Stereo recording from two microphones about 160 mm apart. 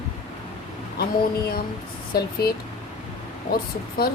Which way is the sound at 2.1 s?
75° left (ahead or behind).